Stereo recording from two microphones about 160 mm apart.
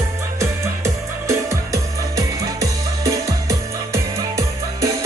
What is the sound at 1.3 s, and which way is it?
Music, 20° right (ahead or behind).